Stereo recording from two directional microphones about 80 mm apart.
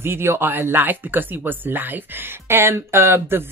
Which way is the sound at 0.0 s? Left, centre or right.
Right.